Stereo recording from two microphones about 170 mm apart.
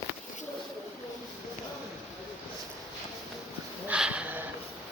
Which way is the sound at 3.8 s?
5° right (ahead or behind).